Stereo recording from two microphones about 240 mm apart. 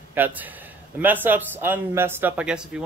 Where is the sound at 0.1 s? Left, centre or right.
Centre.